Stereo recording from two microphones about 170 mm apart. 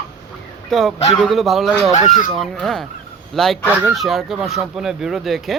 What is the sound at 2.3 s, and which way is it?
Speech, centre (ahead or behind).